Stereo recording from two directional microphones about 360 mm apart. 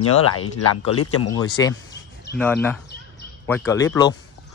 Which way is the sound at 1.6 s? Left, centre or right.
Centre.